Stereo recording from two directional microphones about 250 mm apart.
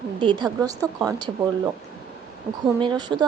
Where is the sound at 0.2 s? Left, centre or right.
Centre.